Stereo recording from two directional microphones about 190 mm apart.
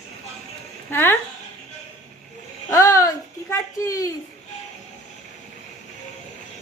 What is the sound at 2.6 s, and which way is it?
A child's voice, 15° left (ahead or behind).